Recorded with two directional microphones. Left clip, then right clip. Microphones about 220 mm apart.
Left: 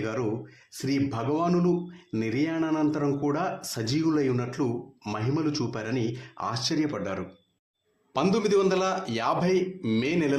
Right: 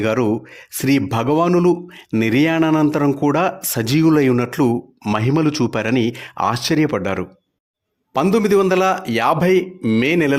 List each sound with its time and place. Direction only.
0.0 s speech: 50° right (ahead or behind)